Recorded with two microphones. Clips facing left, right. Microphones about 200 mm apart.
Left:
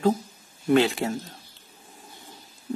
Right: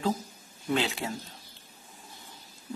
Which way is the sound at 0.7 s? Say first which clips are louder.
Left 9 dB; 50° left (ahead or behind).